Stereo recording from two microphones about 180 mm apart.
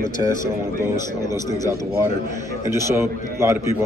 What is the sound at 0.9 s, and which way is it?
Speech, 20° left (ahead or behind).